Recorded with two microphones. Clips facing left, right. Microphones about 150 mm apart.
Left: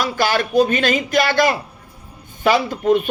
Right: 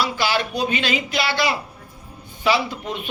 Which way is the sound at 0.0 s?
50° left (ahead or behind).